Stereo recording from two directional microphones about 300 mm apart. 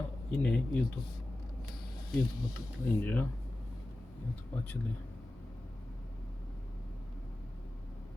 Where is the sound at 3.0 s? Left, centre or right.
Centre.